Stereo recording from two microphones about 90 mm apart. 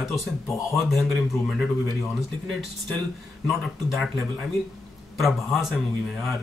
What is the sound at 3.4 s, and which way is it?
Speech, 5° left (ahead or behind).